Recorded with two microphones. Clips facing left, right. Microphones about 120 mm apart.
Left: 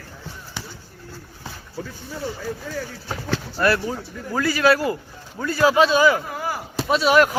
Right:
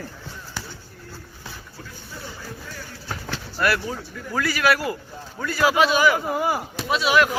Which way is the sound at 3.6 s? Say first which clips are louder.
Left 2 dB; 25° left (ahead or behind).